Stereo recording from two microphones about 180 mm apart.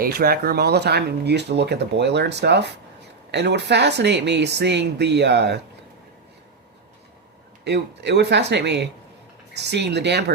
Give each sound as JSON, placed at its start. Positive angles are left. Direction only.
{"t": 0.0, "sound": "speech", "side_deg": -55}
{"t": 7.6, "sound": "speech", "side_deg": -70}